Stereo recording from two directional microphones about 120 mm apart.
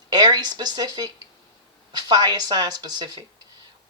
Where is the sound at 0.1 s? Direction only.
35° right (ahead or behind).